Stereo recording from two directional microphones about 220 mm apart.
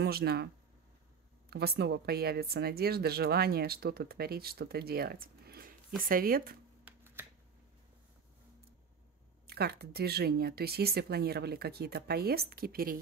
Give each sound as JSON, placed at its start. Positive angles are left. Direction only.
{"t": 0.0, "sound": "speech", "side_deg": -45}
{"t": 1.5, "sound": "speech", "side_deg": -45}
{"t": 6.8, "sound": "finger snapping", "side_deg": -10}
{"t": 9.5, "sound": "speech", "side_deg": -45}